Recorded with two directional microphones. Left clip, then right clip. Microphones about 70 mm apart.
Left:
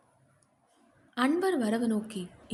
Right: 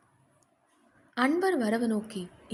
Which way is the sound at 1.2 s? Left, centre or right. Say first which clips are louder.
Right 1 dB; right.